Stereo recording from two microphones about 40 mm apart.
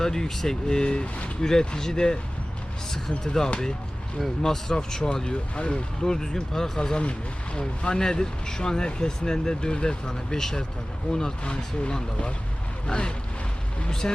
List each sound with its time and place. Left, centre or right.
0.0 s speech: centre